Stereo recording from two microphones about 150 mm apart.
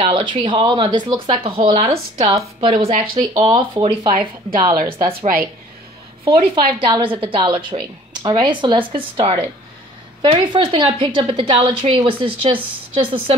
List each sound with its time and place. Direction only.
0.0 s a woman's voice: 35° right (ahead or behind)
6.2 s a woman's voice: 30° right (ahead or behind)